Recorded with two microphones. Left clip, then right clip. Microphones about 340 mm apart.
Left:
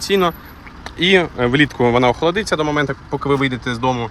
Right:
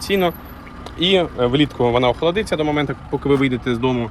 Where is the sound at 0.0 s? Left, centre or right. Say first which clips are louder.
Left 2 dB; centre.